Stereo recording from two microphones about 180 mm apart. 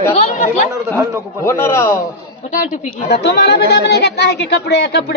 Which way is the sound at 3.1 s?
65° left (ahead or behind).